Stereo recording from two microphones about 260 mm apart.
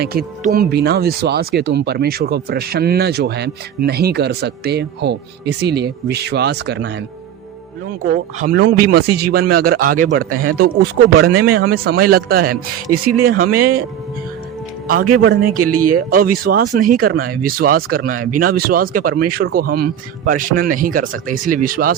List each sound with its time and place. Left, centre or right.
0.0 s speech: right
8.4 s speech: right
15.3 s speech: right